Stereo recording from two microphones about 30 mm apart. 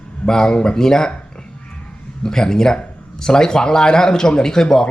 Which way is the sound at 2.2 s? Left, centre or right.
Left.